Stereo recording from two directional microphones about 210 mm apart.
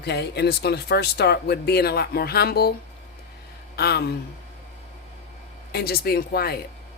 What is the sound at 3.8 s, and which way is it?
Speech, 50° left (ahead or behind).